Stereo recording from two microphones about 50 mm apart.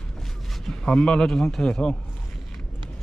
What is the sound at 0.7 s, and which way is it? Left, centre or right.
Speech, centre.